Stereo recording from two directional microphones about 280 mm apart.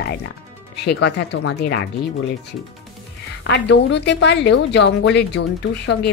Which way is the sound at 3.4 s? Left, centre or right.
Left.